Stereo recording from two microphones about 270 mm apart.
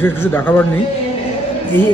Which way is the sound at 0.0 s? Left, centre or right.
Centre.